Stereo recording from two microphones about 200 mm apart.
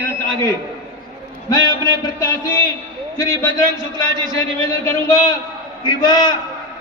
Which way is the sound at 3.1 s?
15° left (ahead or behind).